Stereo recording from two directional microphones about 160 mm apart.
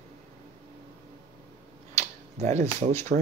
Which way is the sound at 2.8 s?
50° right (ahead or behind).